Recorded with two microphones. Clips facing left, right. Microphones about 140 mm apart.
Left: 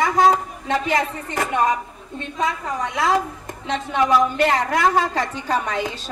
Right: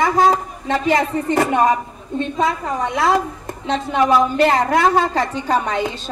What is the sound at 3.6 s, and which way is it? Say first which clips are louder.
A woman's voice: right 3 dB; 30° right (ahead or behind).